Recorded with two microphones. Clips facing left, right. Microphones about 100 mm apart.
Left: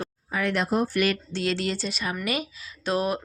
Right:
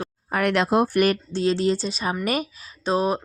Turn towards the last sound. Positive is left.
turn(degrees=-30)  # may be behind; listen again after turning